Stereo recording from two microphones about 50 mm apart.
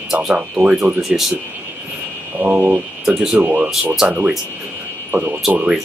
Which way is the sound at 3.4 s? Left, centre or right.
Right.